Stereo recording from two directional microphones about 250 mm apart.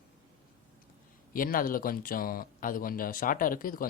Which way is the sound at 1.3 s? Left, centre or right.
Left.